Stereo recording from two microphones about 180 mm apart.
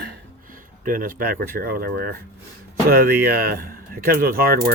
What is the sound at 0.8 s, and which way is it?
Speech, 50° right (ahead or behind).